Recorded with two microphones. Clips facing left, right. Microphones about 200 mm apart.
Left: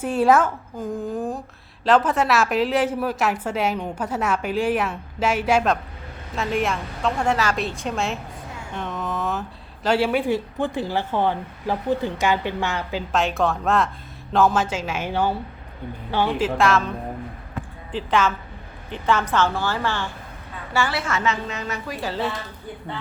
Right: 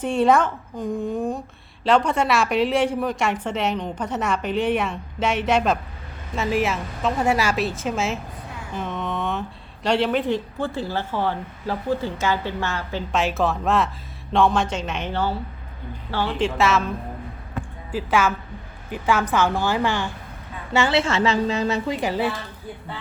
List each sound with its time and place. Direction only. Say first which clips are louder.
0.0 s a woman's voice: even; 5° left (ahead or behind)
13.1 s a woman's voice: even; centre (ahead or behind)
16.4 s a woman's voice: right 2 dB; centre (ahead or behind)
17.9 s a woman's voice: even; 10° right (ahead or behind)